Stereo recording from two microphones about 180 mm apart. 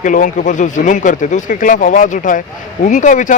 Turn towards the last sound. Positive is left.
turn(degrees=45)  # may be behind; listen again after turning